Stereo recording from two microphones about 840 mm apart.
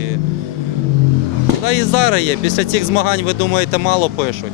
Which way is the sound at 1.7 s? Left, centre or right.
Left.